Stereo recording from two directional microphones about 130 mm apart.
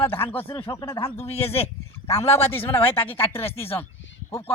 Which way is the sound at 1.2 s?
55° left (ahead or behind).